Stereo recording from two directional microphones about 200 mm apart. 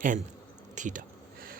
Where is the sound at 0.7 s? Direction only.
40° right (ahead or behind).